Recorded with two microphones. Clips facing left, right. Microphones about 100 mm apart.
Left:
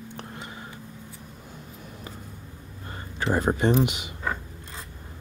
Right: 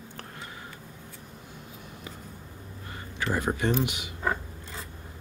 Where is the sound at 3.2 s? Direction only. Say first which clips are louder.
Left 4 dB; 30° left (ahead or behind).